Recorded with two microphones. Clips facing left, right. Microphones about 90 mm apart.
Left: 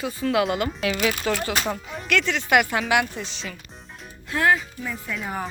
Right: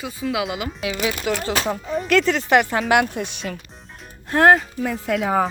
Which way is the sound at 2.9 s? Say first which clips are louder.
Right 4 dB; 50° right (ahead or behind).